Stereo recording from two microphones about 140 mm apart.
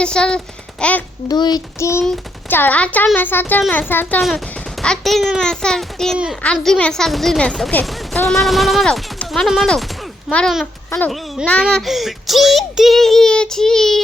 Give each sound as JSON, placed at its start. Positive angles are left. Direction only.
{"t": 0.0, "sound": "speech", "side_deg": 5}
{"t": 1.3, "sound": "child singing", "side_deg": 30}
{"t": 2.5, "sound": "speech", "side_deg": 15}
{"t": 4.0, "sound": "a child's voice", "side_deg": 0}